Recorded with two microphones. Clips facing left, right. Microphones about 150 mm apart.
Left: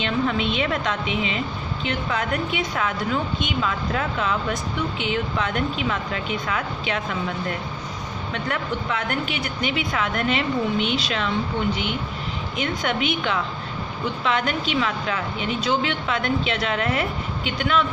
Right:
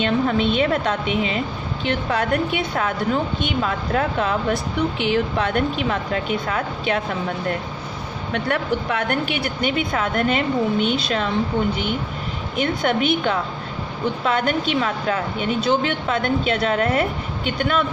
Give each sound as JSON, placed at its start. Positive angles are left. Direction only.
{"t": 0.0, "sound": "a woman's voice", "side_deg": -45}
{"t": 2.7, "sound": "a woman's voice", "side_deg": -40}
{"t": 12.6, "sound": "speech", "side_deg": -40}